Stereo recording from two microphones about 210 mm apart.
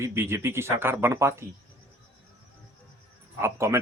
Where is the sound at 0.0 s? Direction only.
10° right (ahead or behind).